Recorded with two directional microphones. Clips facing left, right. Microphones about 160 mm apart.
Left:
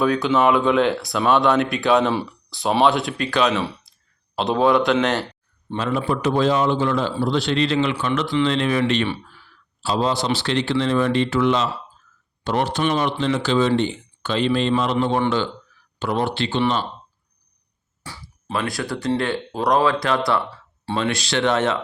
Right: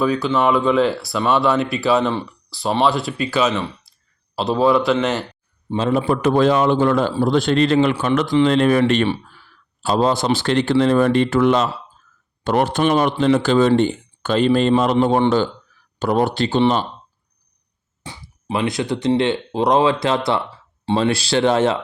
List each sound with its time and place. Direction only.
0.0 s speech: centre (ahead or behind)
6.1 s speech: 55° right (ahead or behind)
9.8 s speech: 50° right (ahead or behind)
16.0 s speech: 40° right (ahead or behind)
18.0 s speech: 20° right (ahead or behind)